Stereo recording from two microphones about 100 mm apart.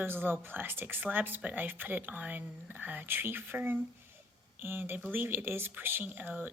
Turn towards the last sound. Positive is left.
turn(degrees=-20)  # may be behind; listen again after turning